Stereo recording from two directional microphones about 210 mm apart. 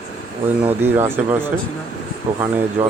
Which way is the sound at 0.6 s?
10° right (ahead or behind).